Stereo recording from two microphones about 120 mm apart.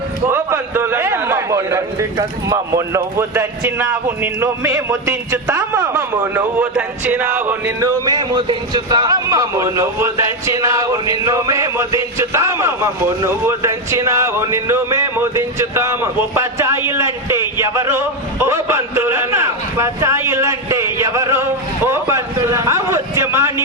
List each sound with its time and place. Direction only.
0.3 s speech: 20° right (ahead or behind)
7.8 s speech: 30° right (ahead or behind)